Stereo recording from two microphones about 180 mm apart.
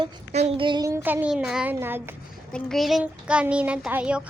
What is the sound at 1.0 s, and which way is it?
Speech, 10° right (ahead or behind).